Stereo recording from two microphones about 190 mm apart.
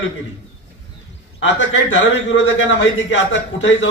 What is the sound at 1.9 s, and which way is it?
A man's voice, 70° left (ahead or behind).